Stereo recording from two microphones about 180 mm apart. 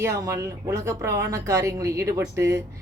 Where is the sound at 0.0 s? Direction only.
15° right (ahead or behind).